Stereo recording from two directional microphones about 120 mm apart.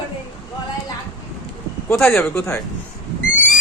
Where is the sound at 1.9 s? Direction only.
20° left (ahead or behind).